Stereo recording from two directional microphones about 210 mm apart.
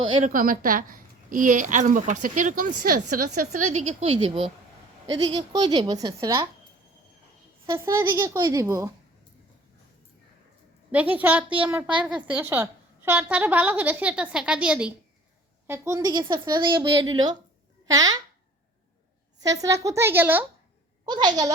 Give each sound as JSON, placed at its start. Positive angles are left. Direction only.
{"t": 0.0, "sound": "a woman's voice", "side_deg": -25}
{"t": 0.3, "sound": "a woman's voice", "side_deg": -40}
{"t": 3.1, "sound": "a woman's voice", "side_deg": -90}
{"t": 3.8, "sound": "a woman's voice", "side_deg": -30}
{"t": 7.7, "sound": "a woman's voice", "side_deg": -10}
{"t": 11.1, "sound": "a woman's voice", "side_deg": -5}
{"t": 19.4, "sound": "a woman's voice", "side_deg": -15}
{"t": 21.0, "sound": "a woman's voice", "side_deg": -20}